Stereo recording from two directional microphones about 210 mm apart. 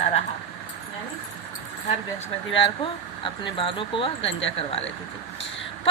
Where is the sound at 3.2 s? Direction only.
25° left (ahead or behind).